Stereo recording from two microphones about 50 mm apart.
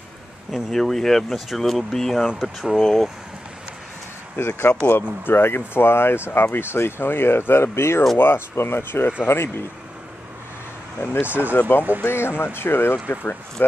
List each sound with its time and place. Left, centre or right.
0.5 s speech: centre
4.4 s speech: left
5.2 s speech: left
11.0 s speech: left
12.0 s speech: left